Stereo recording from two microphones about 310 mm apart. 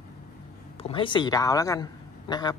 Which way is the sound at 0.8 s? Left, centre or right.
Centre.